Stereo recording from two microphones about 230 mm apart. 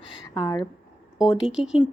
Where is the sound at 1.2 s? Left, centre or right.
Centre.